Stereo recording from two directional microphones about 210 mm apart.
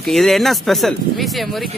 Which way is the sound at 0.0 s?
Centre (ahead or behind).